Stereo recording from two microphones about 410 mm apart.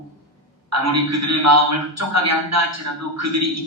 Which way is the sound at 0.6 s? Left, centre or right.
Right.